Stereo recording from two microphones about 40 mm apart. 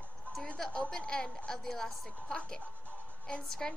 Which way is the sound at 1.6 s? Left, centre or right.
Centre.